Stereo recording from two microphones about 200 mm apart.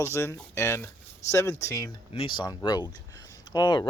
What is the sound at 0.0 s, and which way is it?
Speech, 15° left (ahead or behind).